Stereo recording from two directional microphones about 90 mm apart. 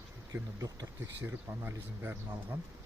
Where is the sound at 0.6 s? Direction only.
45° right (ahead or behind).